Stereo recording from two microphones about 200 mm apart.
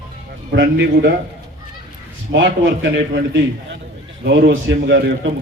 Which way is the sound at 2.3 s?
65° right (ahead or behind).